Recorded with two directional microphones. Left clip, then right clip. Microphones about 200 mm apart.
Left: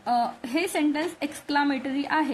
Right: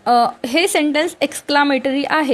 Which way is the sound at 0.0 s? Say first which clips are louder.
Right 11 dB; 45° right (ahead or behind).